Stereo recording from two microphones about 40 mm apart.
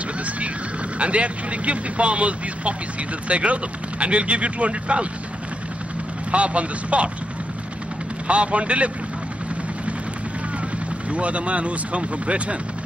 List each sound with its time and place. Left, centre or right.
0.9 s speech: right
6.3 s speech: right
8.3 s speech: right
11.1 s speech: right